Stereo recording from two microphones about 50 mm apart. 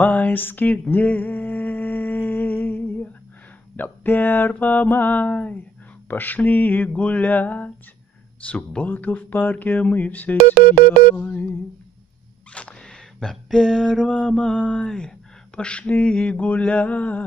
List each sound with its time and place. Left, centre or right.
0.0 s mantra: left
0.4 s speech: left
0.7 s a sound: left
3.7 s mantra: left
12.8 s mantra: centre; by 17.2 s left